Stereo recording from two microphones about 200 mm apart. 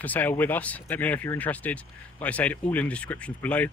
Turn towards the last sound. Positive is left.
turn(degrees=10)  # may be behind; listen again after turning